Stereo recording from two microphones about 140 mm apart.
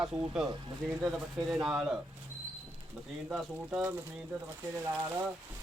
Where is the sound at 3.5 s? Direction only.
10° right (ahead or behind).